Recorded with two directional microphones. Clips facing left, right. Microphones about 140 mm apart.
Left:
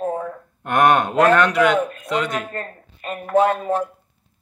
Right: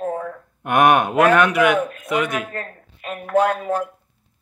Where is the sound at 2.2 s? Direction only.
15° right (ahead or behind).